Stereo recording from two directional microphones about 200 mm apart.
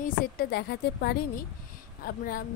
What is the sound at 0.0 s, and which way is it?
A woman's voice, 50° left (ahead or behind).